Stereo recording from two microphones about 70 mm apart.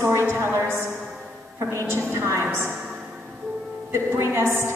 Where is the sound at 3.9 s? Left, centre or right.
Right.